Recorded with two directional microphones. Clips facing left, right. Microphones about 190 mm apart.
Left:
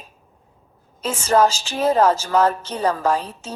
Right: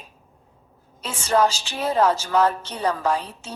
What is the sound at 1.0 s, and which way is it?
A woman's voice, 45° left (ahead or behind).